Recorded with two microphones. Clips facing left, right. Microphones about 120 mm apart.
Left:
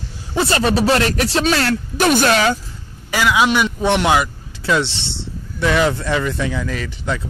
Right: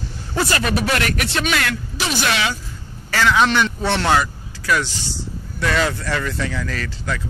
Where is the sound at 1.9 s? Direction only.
50° left (ahead or behind).